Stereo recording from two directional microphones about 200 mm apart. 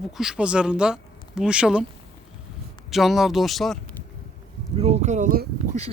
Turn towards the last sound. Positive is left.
turn(degrees=-40)  # may be behind; listen again after turning